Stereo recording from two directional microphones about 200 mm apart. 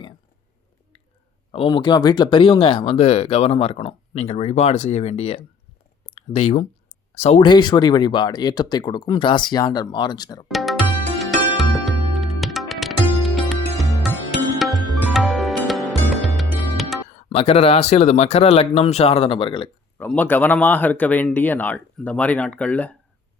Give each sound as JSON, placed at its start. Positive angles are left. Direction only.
{"t": 1.5, "sound": "speech", "side_deg": 25}
{"t": 10.5, "sound": "music", "side_deg": 0}
{"t": 17.2, "sound": "speech", "side_deg": 30}
{"t": 20.0, "sound": "speech", "side_deg": 10}